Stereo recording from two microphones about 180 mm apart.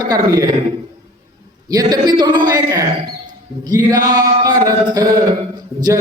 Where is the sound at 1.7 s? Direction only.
20° right (ahead or behind).